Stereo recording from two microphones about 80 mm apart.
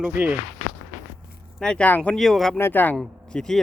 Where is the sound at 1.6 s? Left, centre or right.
Centre.